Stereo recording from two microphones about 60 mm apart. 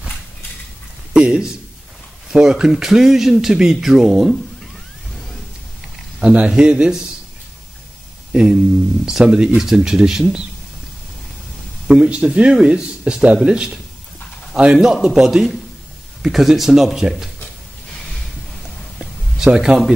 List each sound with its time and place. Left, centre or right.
1.1 s a sound: centre
2.4 s speech: centre
6.3 s speech: centre
8.3 s speech: centre
11.9 s speech: centre
18.9 s a sound: centre